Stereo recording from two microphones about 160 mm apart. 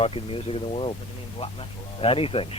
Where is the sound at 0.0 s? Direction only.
35° left (ahead or behind).